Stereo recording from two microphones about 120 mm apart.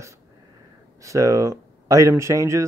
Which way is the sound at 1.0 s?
25° right (ahead or behind).